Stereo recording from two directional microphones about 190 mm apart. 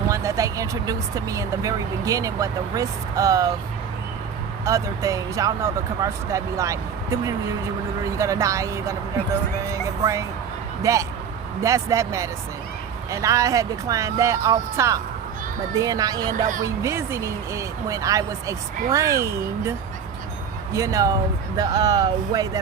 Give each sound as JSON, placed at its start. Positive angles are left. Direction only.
{"t": 0.1, "sound": "speech", "side_deg": -15}
{"t": 4.6, "sound": "speech", "side_deg": -15}
{"t": 20.7, "sound": "speech", "side_deg": -15}